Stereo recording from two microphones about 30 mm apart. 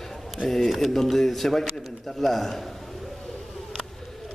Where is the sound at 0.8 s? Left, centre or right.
Centre.